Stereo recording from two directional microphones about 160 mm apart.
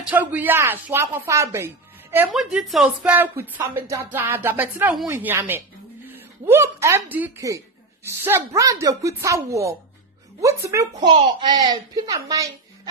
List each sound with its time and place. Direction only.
0.0 s speech: 10° right (ahead or behind)
2.3 s a woman's voice: 5° right (ahead or behind); by 11.1 s 20° right (ahead or behind)
11.1 s a woman's voice: 30° right (ahead or behind)